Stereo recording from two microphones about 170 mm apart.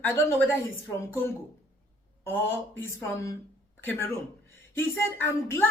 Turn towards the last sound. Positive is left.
turn(degrees=15)  # may be behind; listen again after turning